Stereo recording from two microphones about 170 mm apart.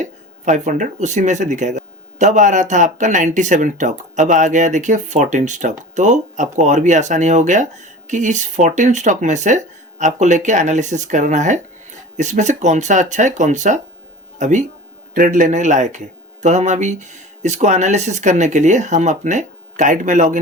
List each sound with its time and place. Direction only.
0.0 s a man's voice: 45° right (ahead or behind)